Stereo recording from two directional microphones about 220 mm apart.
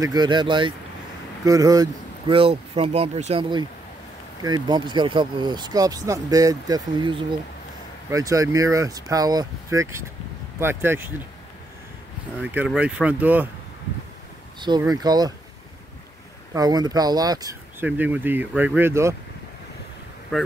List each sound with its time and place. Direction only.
0.1 s speech: 20° right (ahead or behind)
12.4 s speech: 5° right (ahead or behind)
14.6 s speech: 20° right (ahead or behind)
16.5 s speech: 20° right (ahead or behind)
20.3 s speech: 5° left (ahead or behind)